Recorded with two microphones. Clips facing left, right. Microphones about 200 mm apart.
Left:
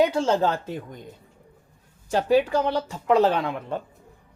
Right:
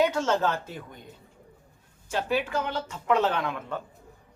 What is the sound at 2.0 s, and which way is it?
Speech, 40° left (ahead or behind).